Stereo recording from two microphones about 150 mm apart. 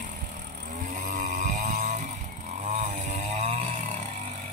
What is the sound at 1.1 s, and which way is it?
Vehicle, 55° right (ahead or behind).